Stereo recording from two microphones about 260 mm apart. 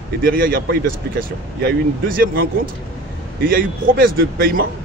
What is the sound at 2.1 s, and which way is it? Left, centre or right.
Speech, right.